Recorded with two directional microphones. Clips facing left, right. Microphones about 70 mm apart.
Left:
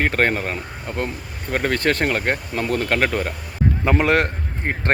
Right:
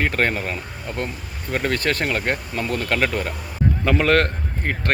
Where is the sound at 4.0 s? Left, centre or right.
Centre.